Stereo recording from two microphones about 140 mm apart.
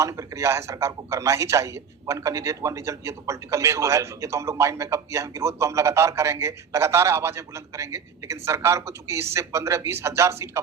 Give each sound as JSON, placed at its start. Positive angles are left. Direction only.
{"t": 0.0, "sound": "a man's voice", "side_deg": -20}